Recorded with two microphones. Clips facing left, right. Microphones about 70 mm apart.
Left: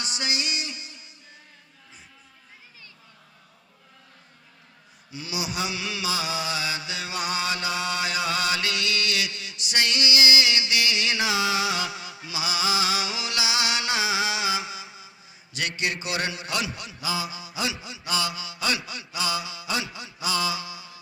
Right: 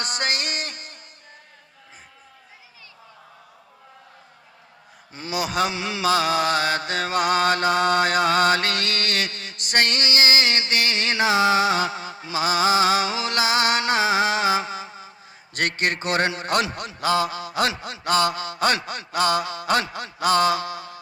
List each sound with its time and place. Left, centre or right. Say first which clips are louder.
0.0 s music: right 4 dB; right
5.1 s mantra: right 6 dB; right
5.7 s mantra: right 8 dB; right